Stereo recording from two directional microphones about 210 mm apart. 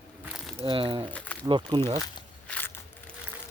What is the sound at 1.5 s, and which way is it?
Speech, 20° right (ahead or behind).